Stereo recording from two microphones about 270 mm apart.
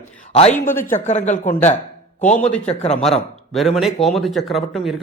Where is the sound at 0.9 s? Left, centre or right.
Left.